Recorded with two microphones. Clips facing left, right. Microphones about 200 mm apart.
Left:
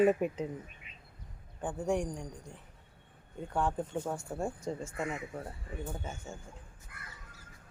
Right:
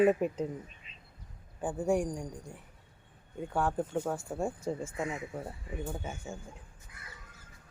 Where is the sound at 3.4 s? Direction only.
5° right (ahead or behind).